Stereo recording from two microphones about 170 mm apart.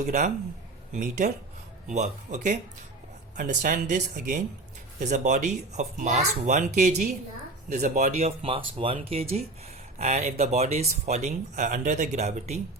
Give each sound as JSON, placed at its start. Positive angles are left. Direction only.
{"t": 0.0, "sound": "speech", "side_deg": -45}